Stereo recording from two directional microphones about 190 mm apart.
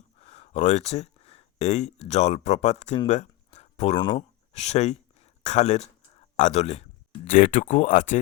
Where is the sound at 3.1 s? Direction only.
35° left (ahead or behind).